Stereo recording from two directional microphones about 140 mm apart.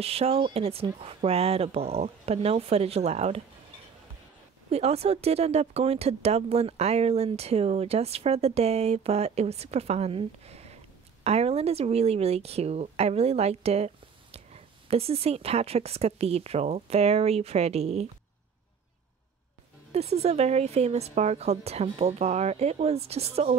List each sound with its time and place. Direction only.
0.0 s speech: 45° right (ahead or behind)
4.6 s speech: 50° right (ahead or behind)
19.9 s speech: 50° right (ahead or behind)